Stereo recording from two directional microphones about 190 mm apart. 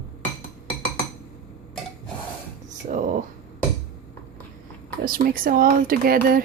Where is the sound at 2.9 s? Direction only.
45° right (ahead or behind).